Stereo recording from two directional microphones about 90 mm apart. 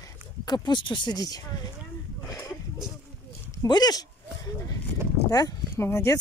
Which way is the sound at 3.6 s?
50° left (ahead or behind).